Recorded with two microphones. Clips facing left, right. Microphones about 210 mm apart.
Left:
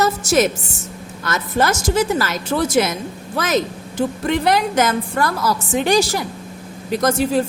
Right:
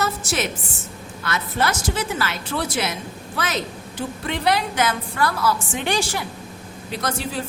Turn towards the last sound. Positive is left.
turn(degrees=45)  # may be behind; listen again after turning